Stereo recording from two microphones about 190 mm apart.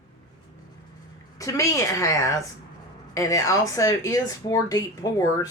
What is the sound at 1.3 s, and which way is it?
A woman's voice, 15° left (ahead or behind).